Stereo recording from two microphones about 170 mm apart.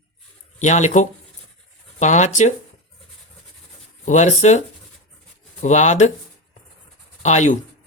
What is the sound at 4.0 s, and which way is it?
Speech, 45° left (ahead or behind).